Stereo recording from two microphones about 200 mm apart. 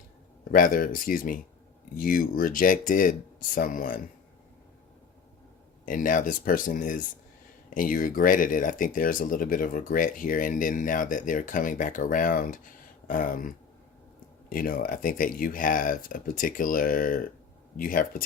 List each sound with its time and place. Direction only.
0.5 s speech: 45° left (ahead or behind)
5.8 s speech: 40° left (ahead or behind)
14.5 s speech: 45° left (ahead or behind)